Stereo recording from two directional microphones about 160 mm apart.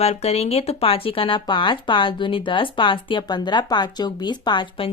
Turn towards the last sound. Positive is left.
turn(degrees=30)  # may be behind; listen again after turning